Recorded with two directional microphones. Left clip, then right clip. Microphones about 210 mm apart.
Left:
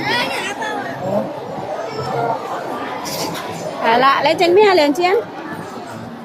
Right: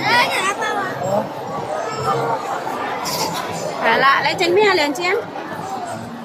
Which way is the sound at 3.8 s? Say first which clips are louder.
Left 2 dB; 15° left (ahead or behind).